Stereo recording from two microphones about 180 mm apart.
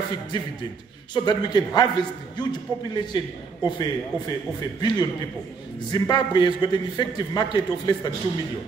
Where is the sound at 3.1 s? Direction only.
20° left (ahead or behind).